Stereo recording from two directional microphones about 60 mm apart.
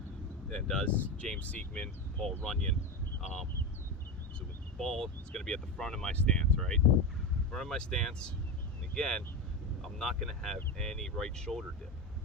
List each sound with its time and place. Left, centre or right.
0.5 s speech: centre
4.4 s speech: centre